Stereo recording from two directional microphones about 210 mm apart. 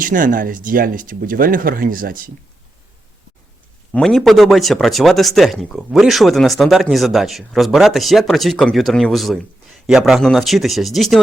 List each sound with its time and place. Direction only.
0.0 s speech: 40° right (ahead or behind)
3.9 s speech: centre (ahead or behind)